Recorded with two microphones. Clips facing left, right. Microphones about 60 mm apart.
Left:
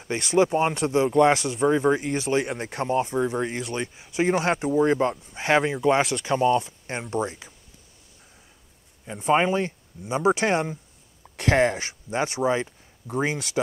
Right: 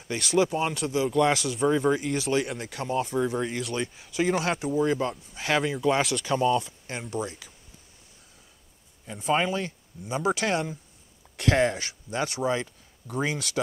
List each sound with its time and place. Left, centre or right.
0.0 s speech: left
9.0 s speech: left
11.3 s speech: left
11.8 s speech: left